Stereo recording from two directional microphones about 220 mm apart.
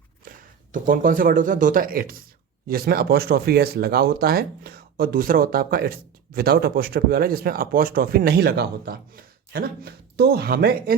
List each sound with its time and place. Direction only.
0.3 s speech: 40° right (ahead or behind)